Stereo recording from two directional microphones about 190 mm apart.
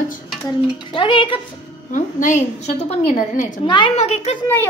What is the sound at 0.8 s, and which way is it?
Speech, 25° left (ahead or behind).